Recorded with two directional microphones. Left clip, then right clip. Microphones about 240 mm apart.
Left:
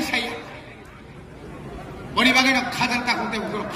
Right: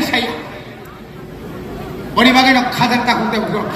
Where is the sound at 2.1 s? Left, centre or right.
Centre.